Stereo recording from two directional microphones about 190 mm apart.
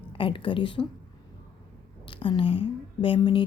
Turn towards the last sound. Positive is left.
turn(degrees=25)  # may be behind; listen again after turning